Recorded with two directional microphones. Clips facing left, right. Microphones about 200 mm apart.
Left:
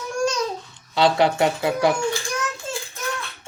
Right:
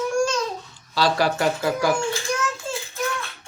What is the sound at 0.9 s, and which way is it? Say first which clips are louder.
Speech: left 3 dB; 20° left (ahead or behind).